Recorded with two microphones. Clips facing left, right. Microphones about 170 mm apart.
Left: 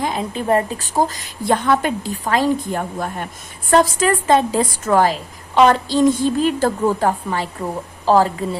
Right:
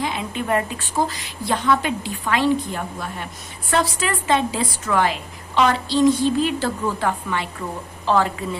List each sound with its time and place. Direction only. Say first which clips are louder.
0.0 s a woman's voice: left 3 dB; 40° left (ahead or behind)